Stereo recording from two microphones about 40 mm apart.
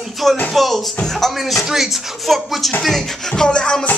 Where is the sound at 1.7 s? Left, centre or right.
Centre.